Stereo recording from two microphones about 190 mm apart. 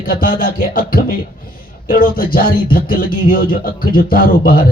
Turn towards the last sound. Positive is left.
turn(degrees=50)  # may be behind; listen again after turning